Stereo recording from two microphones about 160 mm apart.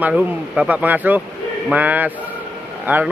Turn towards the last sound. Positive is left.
turn(degrees=-10)  # may be behind; listen again after turning